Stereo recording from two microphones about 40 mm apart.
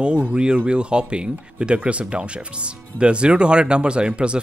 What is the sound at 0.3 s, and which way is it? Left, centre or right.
Speech, right.